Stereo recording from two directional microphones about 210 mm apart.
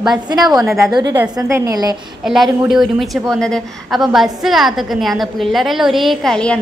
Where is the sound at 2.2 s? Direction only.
Centre (ahead or behind).